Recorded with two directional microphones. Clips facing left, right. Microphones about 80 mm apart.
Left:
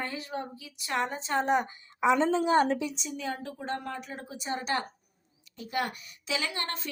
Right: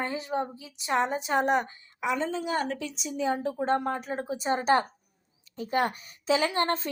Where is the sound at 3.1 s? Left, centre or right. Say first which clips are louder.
Right 8 dB; right.